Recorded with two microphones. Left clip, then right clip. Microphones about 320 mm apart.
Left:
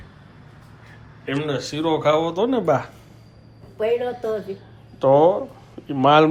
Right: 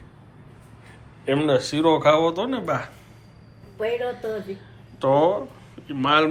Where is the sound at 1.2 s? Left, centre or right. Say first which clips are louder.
Right 4 dB; centre.